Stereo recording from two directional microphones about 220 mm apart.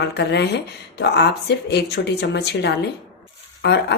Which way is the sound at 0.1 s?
50° left (ahead or behind).